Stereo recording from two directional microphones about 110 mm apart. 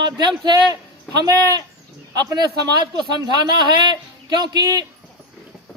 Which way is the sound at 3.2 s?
45° right (ahead or behind).